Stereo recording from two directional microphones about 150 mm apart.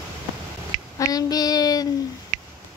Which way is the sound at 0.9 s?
25° left (ahead or behind).